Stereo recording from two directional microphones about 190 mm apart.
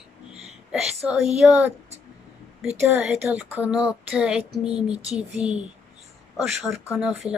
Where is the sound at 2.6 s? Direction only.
10° right (ahead or behind).